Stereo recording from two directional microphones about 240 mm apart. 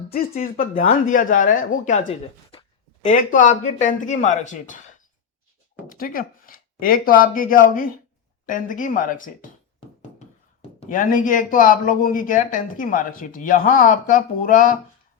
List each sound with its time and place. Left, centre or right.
0.1 s speech: left
5.9 s speech: left
10.8 s speech: left